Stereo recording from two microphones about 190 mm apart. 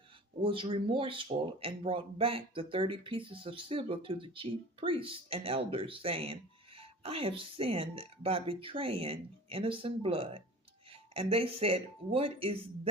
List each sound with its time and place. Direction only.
0.4 s speech: 25° right (ahead or behind)